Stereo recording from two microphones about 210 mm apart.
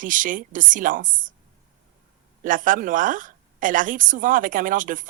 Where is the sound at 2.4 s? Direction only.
40° right (ahead or behind).